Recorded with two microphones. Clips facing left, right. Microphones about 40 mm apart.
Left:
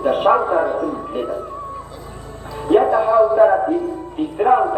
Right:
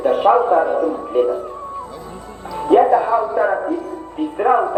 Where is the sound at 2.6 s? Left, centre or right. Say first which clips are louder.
Right 2 dB; centre.